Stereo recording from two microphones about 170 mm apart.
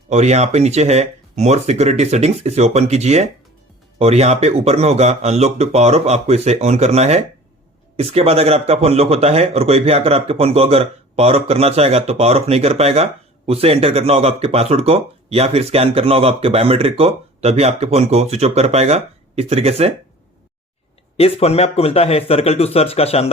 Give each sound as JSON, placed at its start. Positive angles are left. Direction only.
{"t": 0.1, "sound": "speech", "side_deg": -40}
{"t": 21.2, "sound": "speech", "side_deg": 35}